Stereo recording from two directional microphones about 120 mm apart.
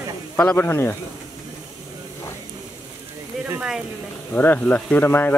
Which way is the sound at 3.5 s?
5° right (ahead or behind).